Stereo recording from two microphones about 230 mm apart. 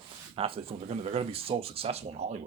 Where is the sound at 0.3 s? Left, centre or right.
Right.